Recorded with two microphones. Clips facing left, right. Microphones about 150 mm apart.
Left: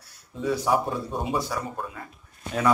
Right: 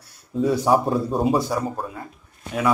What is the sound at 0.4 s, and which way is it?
Speech, 35° right (ahead or behind).